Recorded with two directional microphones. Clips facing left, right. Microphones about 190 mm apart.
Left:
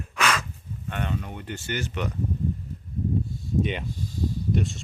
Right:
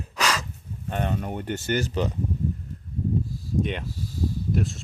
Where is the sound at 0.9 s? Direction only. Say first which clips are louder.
Right 3 dB; 40° right (ahead or behind).